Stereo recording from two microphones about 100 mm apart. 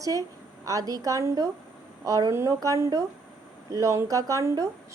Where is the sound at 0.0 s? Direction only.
35° right (ahead or behind).